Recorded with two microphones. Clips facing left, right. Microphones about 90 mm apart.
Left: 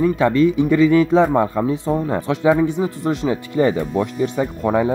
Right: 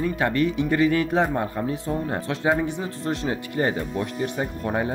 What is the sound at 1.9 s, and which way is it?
Speech, 90° left.